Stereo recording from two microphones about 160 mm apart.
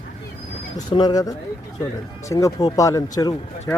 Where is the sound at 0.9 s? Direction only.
25° left (ahead or behind).